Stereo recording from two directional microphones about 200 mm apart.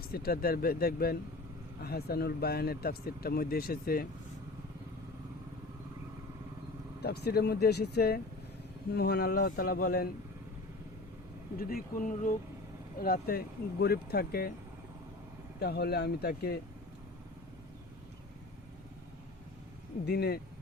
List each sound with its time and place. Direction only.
0.1 s speech: 50° left (ahead or behind)
7.0 s speech: 55° left (ahead or behind)
11.5 s speech: 45° left (ahead or behind)
15.6 s speech: 50° left (ahead or behind)
20.1 s speech: 50° left (ahead or behind)